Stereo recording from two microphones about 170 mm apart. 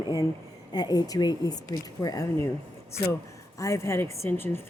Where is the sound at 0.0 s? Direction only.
20° left (ahead or behind).